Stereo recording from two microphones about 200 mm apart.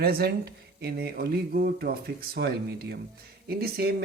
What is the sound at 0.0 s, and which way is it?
A man's voice, 50° right (ahead or behind).